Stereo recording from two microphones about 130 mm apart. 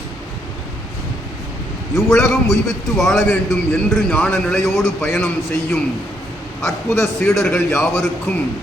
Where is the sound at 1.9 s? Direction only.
5° left (ahead or behind).